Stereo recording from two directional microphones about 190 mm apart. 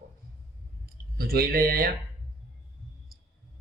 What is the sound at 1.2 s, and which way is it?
Speech, 55° right (ahead or behind).